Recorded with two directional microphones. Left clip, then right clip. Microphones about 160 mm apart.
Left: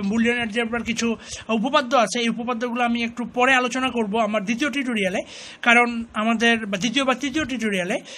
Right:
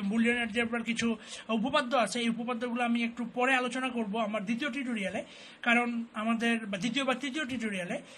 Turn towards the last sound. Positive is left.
turn(degrees=35)  # may be behind; listen again after turning